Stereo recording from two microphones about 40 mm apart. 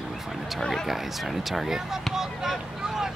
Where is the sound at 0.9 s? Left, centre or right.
Centre.